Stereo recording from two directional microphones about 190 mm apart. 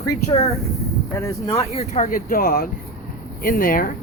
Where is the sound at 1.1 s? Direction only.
15° left (ahead or behind).